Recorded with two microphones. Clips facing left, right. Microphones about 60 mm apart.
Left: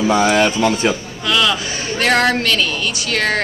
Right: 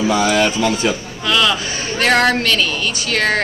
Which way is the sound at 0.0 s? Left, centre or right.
Left.